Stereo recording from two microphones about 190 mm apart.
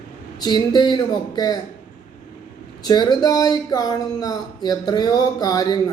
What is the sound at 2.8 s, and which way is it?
Speech, 20° left (ahead or behind).